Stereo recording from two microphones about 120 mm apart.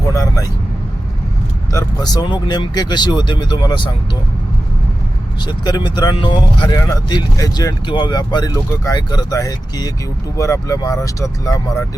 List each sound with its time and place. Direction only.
0.1 s vehicle: 30° left (ahead or behind)
2.0 s speech: 35° left (ahead or behind)
5.4 s speech: 35° left (ahead or behind)
6.7 s speech: 30° left (ahead or behind)
8.5 s speech: 25° left (ahead or behind)